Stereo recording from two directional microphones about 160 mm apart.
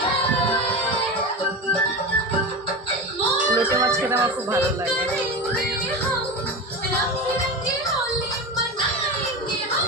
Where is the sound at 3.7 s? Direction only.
20° right (ahead or behind).